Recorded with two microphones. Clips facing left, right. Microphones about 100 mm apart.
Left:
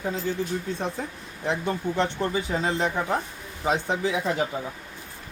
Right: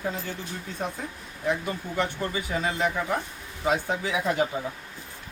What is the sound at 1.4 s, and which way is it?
Speech, 25° left (ahead or behind).